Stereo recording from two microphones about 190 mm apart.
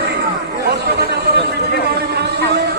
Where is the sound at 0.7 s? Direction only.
55° right (ahead or behind).